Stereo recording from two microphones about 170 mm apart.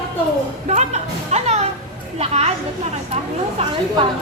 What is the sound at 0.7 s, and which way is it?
Speech, 40° right (ahead or behind).